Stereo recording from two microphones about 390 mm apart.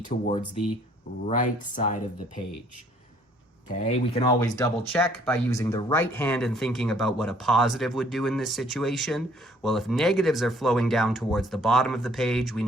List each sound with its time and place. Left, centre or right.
1.3 s speech: centre
3.8 s speech: centre